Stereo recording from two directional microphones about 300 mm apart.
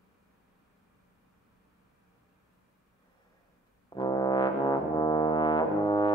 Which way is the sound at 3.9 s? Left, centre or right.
Centre.